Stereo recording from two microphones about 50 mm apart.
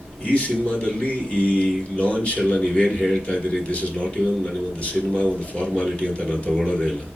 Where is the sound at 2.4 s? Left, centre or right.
Centre.